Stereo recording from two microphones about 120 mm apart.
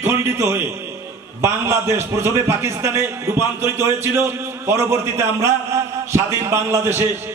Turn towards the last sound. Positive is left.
turn(degrees=-20)  # may be behind; listen again after turning